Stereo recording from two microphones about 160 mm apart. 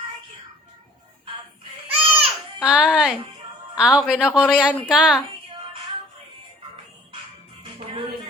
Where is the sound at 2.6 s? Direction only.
5° right (ahead or behind).